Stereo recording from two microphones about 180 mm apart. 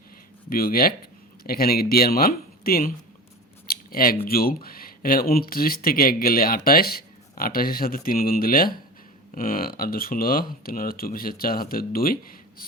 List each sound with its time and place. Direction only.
0.5 s speech: 55° left (ahead or behind)
3.7 s scissors: 55° left (ahead or behind)
4.3 s speech: 55° left (ahead or behind)